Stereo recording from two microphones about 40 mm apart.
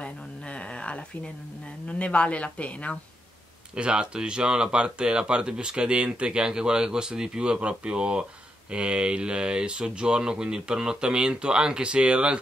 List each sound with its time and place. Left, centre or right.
0.0 s a sound: left
1.9 s speech: left
3.7 s speech: right